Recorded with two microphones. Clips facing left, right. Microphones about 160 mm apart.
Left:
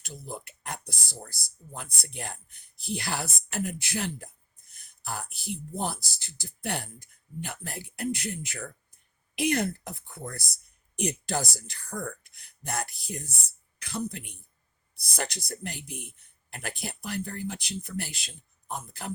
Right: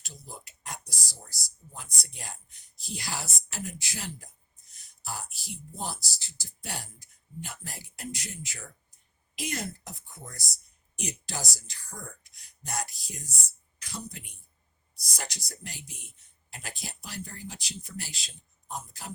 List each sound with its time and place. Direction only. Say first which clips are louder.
0.0 s speech: left 7 dB; 55° left (ahead or behind)